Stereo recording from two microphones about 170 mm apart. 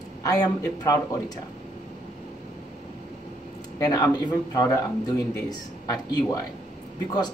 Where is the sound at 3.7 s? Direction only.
20° left (ahead or behind).